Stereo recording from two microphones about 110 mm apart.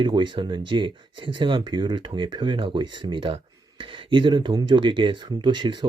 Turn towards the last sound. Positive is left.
turn(degrees=-45)  # may be behind; listen again after turning